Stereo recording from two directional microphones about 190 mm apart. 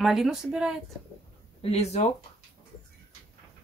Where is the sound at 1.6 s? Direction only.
35° left (ahead or behind).